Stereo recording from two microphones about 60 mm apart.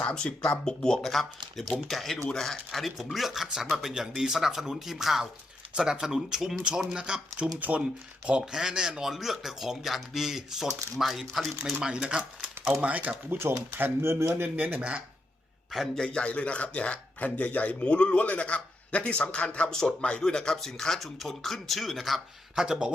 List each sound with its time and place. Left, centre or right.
0.0 s speech: centre
11.9 s speech: centre
14.0 s speech: right
14.4 s speech: right
16.0 s speech: centre